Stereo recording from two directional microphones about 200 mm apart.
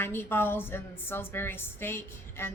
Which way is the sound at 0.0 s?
10° left (ahead or behind).